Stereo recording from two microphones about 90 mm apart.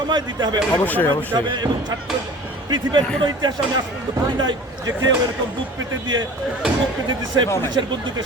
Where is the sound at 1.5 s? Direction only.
55° right (ahead or behind).